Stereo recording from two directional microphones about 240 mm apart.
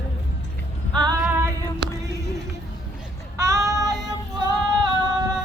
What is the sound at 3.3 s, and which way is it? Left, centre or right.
Child singing, centre.